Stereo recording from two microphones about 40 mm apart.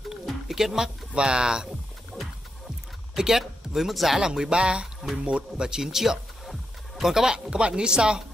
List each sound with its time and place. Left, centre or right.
0.1 s a sound: centre
1.1 s speech: right
2.1 s music: centre
3.2 s speech: centre
4.2 s speech: centre